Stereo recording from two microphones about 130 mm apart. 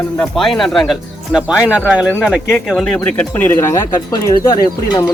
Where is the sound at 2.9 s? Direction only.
10° left (ahead or behind).